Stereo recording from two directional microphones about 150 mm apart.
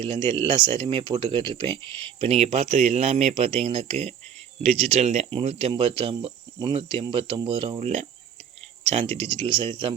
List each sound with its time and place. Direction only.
0.3 s speech: 30° right (ahead or behind)